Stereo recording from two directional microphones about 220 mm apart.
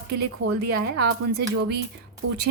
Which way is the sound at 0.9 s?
50° right (ahead or behind).